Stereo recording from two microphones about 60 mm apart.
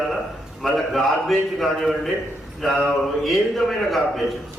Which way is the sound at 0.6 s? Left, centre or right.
Centre.